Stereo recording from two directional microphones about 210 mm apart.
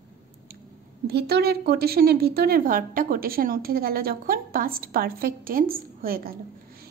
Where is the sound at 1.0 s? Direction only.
50° right (ahead or behind).